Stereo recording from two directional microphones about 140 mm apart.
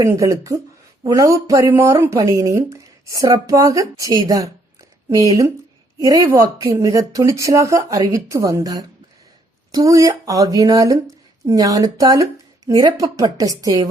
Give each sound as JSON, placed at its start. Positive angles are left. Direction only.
{"t": 0.0, "sound": "speech", "side_deg": -20}
{"t": 4.3, "sound": "a sound", "side_deg": -25}
{"t": 6.1, "sound": "speech", "side_deg": -25}